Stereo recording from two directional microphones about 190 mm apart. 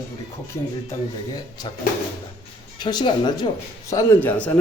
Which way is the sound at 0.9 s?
20° left (ahead or behind).